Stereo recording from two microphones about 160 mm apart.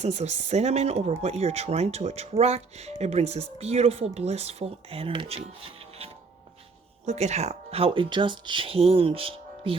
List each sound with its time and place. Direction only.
0.0 s speech: 45° right (ahead or behind)